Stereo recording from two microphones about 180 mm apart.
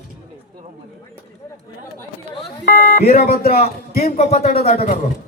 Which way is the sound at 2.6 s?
55° left (ahead or behind).